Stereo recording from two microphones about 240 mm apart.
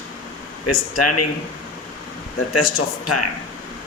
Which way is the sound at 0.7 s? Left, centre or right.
Left.